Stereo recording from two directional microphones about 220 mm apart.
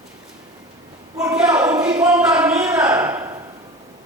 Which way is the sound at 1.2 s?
10° right (ahead or behind).